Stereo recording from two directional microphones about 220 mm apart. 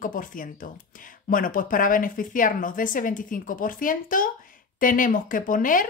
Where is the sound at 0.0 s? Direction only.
40° left (ahead or behind).